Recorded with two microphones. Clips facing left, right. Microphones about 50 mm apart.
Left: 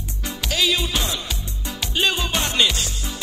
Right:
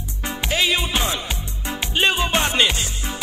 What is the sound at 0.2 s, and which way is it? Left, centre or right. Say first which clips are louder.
Music: right 2 dB; right.